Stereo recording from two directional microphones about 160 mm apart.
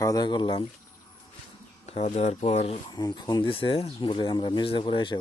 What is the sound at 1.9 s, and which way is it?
Speech, 40° left (ahead or behind).